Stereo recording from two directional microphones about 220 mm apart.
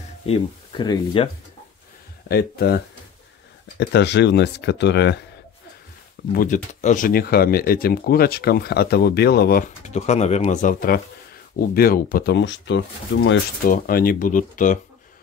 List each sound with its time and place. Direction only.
0.3 s speech: 20° left (ahead or behind)
2.2 s speech: 45° left (ahead or behind)
3.8 s speech: 50° left (ahead or behind)
6.3 s speech: 35° left (ahead or behind); by 13.4 s 55° left (ahead or behind)
13.7 s speech: 40° left (ahead or behind)